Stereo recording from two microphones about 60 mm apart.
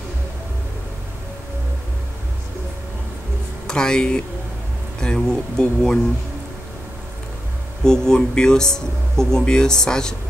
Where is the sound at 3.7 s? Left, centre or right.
Centre.